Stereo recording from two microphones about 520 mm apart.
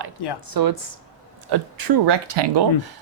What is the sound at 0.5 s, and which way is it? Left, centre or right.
Speech, right.